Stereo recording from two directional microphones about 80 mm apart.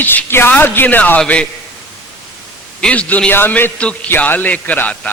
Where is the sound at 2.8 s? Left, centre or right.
Centre.